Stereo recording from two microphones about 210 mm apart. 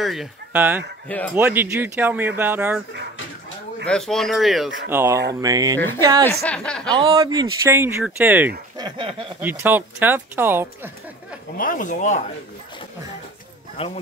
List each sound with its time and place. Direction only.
0.0 s speech: centre (ahead or behind)
1.0 s speech: 5° left (ahead or behind)
1.3 s speech: 10° right (ahead or behind)
3.8 s speech: 5° left (ahead or behind); by 5.8 s 15° right (ahead or behind)
6.4 s speech: 5° left (ahead or behind)
6.9 s a man's voice: 20° right (ahead or behind)
8.8 s a man's voice: 25° right (ahead or behind)
9.4 s speech: 10° right (ahead or behind)
11.5 s speech: 40° left (ahead or behind)
13.8 s speech: 30° left (ahead or behind)